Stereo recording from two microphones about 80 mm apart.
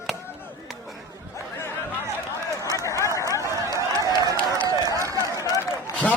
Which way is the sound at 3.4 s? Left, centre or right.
Right.